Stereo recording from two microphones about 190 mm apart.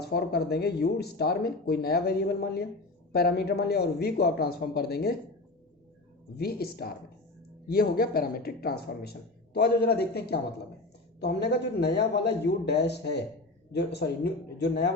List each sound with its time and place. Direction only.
0.0 s speech: 55° left (ahead or behind)
6.3 s speech: 55° left (ahead or behind)